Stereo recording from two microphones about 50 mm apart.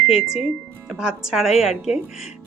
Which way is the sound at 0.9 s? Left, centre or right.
Centre.